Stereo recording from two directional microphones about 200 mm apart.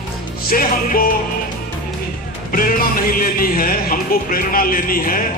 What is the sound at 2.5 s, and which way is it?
Speech, 45° left (ahead or behind).